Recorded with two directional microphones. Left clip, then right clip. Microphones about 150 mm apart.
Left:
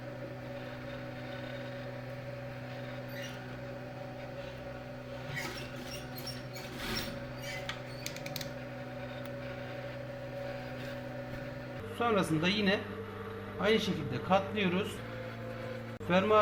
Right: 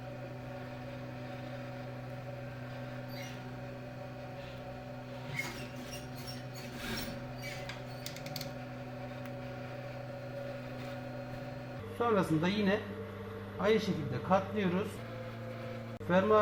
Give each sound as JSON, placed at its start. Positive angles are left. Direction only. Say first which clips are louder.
{"t": 11.9, "sound": "a man's voice", "louder": "even", "side_deg": -25}
{"t": 16.0, "sound": "a man's voice", "louder": "even", "side_deg": -15}